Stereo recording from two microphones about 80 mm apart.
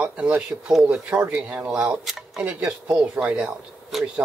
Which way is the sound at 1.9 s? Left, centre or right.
Centre.